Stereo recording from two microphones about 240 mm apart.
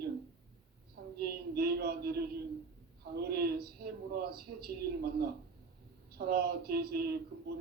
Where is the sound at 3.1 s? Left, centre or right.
Right.